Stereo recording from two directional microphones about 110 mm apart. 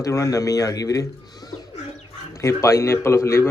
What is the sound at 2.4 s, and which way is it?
Speech, 25° left (ahead or behind).